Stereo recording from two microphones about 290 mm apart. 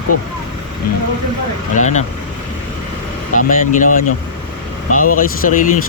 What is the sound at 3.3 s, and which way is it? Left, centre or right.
Speech, left.